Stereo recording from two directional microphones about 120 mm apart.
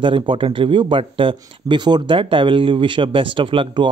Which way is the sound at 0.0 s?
45° right (ahead or behind).